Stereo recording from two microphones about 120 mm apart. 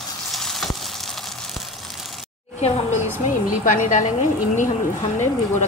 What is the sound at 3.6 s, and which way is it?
Speech, 90° left.